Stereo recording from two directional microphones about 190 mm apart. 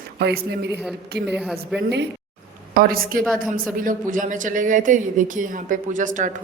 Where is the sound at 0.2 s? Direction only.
60° right (ahead or behind).